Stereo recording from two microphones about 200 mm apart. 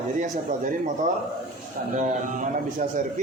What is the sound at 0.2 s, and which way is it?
A man's voice, 40° right (ahead or behind).